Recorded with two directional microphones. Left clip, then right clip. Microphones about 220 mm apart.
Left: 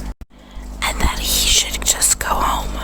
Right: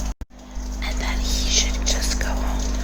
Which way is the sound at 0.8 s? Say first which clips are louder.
Left 8 dB; 35° left (ahead or behind).